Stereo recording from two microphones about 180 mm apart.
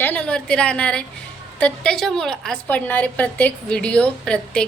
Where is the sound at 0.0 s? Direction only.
5° left (ahead or behind).